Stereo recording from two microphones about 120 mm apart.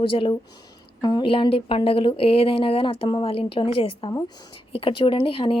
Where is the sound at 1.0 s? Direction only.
45° left (ahead or behind).